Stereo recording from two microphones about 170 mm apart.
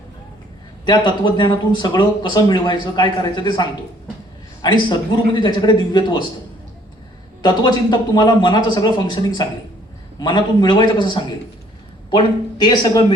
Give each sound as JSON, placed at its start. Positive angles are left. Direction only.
{"t": 0.9, "sound": "a man's voice", "side_deg": 25}
{"t": 7.4, "sound": "a man's voice", "side_deg": 25}